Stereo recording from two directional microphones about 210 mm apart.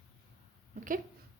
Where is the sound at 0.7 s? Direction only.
40° right (ahead or behind).